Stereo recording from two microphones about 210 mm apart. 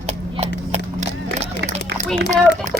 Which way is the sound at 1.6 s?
50° right (ahead or behind).